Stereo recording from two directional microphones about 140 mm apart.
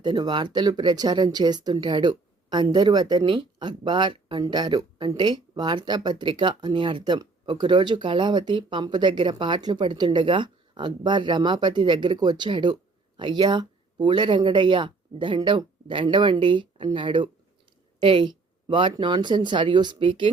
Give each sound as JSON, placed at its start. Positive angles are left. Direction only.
{"t": 0.0, "sound": "speech", "side_deg": -30}